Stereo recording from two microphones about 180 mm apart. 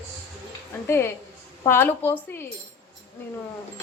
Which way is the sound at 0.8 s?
15° left (ahead or behind).